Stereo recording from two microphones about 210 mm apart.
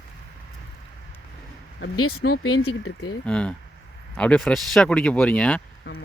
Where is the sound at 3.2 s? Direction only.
5° left (ahead or behind).